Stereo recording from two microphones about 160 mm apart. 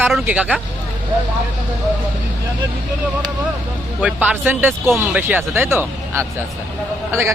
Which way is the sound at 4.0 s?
10° right (ahead or behind).